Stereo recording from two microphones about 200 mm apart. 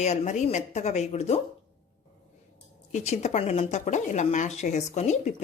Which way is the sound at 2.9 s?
35° left (ahead or behind).